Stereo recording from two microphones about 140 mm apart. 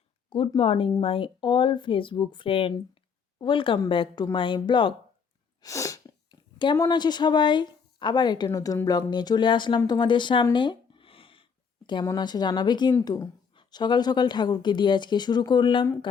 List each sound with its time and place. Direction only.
0.3 s speech: 35° left (ahead or behind)
5.6 s sneeze: 25° left (ahead or behind)
6.6 s speech: 30° left (ahead or behind)
10.5 s a sound: 35° left (ahead or behind)
11.9 s speech: 30° left (ahead or behind)